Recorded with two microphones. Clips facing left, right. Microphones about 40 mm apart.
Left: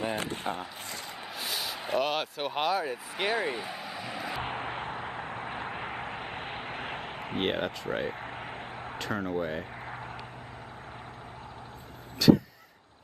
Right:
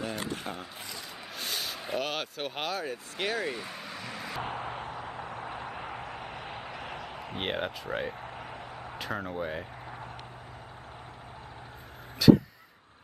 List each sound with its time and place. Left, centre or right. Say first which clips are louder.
0.4 s speech: left 4 dB; centre
1.3 s speech: even; centre
4.4 s a sound: left 1 dB; left
7.3 s speech: left 3 dB; centre
8.3 s a sound: left 2 dB; left
8.9 s speech: left 3 dB; centre
12.2 s vehicle: right 2 dB; centre